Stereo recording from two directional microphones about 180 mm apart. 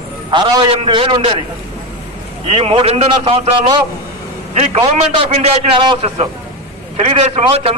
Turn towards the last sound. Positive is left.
turn(degrees=-35)  # may be behind; listen again after turning